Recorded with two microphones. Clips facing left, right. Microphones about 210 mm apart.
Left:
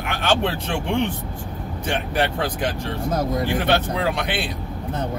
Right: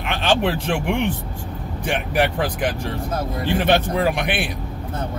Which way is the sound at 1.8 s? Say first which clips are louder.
Right 2 dB; 15° right (ahead or behind).